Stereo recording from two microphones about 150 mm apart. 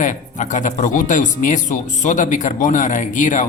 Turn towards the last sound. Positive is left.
turn(degrees=55)  # may be behind; listen again after turning